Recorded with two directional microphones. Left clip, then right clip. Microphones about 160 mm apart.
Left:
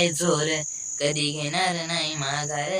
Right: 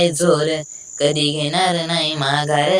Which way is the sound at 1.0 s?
45° right (ahead or behind).